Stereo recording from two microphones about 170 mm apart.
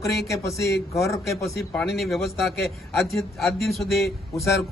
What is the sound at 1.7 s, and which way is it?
A man's voice, centre (ahead or behind).